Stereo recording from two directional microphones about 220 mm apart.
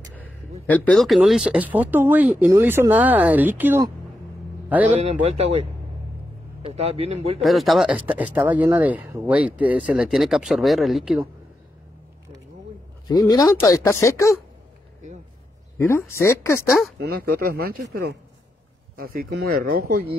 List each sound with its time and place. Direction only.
0.1 s a man's voice: 5° left (ahead or behind)
4.9 s a man's voice: 30° right (ahead or behind)
7.4 s speech: centre (ahead or behind)
13.0 s speech: 20° left (ahead or behind)
15.8 s speech: 10° left (ahead or behind)
17.0 s speech: 45° right (ahead or behind)
18.9 s speech: 45° right (ahead or behind)